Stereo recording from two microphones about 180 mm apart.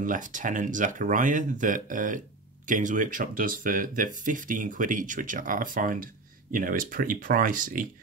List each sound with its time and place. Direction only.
0.0 s speech: 45° right (ahead or behind)